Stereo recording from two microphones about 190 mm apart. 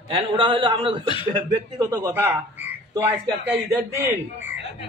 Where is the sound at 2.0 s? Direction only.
10° right (ahead or behind).